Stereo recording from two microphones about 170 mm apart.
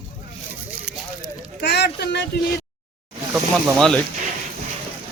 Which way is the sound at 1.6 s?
75° left (ahead or behind).